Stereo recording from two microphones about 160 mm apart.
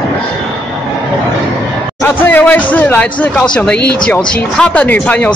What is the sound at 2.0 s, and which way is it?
Speech, 10° left (ahead or behind).